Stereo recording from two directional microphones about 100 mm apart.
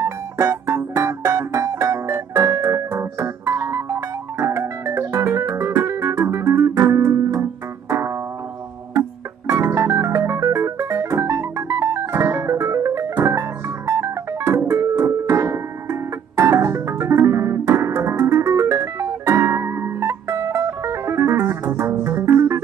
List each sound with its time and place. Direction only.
0.0 s music: 30° right (ahead or behind)
9.5 s music: 25° right (ahead or behind)